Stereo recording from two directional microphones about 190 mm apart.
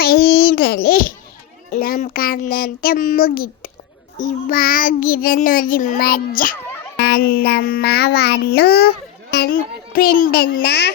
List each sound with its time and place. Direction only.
0.0 s a sound: 55° left (ahead or behind)
1.7 s child singing: 45° left (ahead or behind)
9.3 s a child's voice: 50° left (ahead or behind)